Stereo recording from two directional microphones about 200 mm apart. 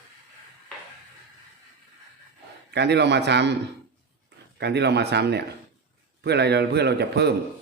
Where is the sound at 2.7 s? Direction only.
55° right (ahead or behind).